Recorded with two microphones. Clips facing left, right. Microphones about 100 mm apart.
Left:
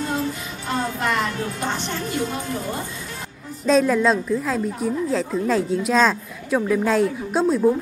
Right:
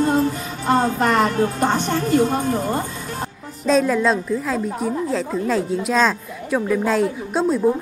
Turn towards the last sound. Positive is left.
turn(degrees=0)  # may be behind; listen again after turning